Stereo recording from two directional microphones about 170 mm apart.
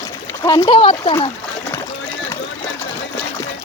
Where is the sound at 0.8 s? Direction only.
30° left (ahead or behind).